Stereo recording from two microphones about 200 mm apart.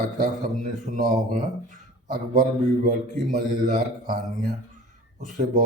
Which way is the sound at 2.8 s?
40° right (ahead or behind).